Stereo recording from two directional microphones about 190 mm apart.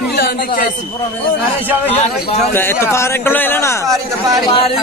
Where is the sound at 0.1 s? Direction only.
55° left (ahead or behind).